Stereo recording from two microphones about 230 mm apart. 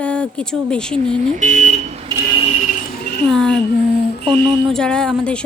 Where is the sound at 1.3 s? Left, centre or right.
Right.